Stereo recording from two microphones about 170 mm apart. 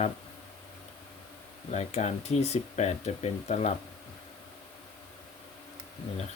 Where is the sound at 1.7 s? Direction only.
40° left (ahead or behind).